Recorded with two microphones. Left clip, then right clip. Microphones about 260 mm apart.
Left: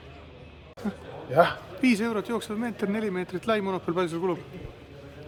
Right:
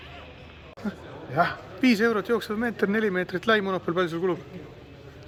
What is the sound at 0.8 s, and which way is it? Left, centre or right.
Speech, centre.